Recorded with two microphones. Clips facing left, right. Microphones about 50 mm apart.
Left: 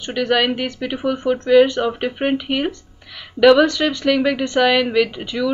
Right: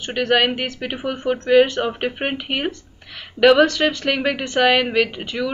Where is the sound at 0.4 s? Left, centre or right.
Centre.